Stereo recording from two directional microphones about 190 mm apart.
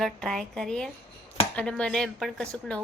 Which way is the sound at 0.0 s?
Centre (ahead or behind).